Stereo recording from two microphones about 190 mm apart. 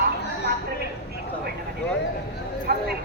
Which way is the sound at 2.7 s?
55° right (ahead or behind).